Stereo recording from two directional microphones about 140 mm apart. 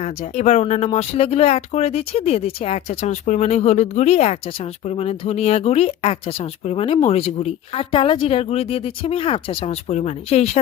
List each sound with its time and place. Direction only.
0.0 s speech: 55° left (ahead or behind)